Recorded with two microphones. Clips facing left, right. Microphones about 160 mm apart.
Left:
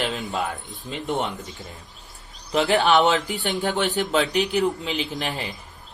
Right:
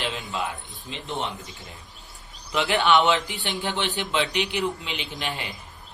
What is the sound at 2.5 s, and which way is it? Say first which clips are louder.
Speech: left 2 dB; 40° left (ahead or behind).